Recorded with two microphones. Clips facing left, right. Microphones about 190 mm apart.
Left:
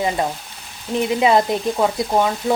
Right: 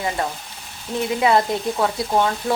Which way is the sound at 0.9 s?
20° left (ahead or behind).